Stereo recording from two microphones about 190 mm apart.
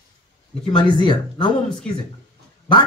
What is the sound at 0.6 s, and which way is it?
Speech, 25° left (ahead or behind).